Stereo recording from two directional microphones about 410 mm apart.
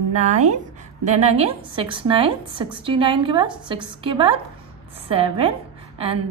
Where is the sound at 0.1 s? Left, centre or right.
Centre.